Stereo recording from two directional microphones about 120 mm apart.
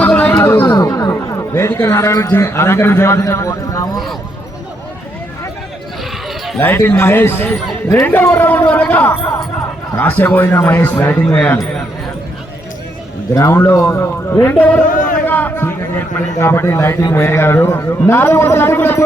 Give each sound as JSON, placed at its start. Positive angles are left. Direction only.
{"t": 0.0, "sound": "chatter", "side_deg": 10}
{"t": 0.7, "sound": "speech", "side_deg": 30}
{"t": 6.6, "sound": "speech", "side_deg": 15}
{"t": 13.3, "sound": "a man's voice", "side_deg": 20}
{"t": 14.8, "sound": "a sound", "side_deg": 90}
{"t": 15.3, "sound": "a man's voice", "side_deg": 15}